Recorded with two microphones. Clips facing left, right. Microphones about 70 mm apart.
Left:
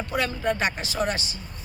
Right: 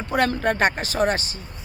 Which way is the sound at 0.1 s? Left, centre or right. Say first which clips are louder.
Right 6 dB; right.